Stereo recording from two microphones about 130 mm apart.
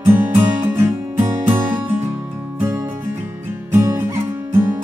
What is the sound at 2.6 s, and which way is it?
Music, 25° right (ahead or behind).